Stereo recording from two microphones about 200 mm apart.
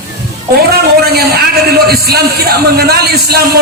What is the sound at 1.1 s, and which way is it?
A man's voice, 50° right (ahead or behind).